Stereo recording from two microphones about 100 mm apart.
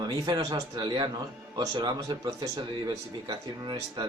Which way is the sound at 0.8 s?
50° right (ahead or behind).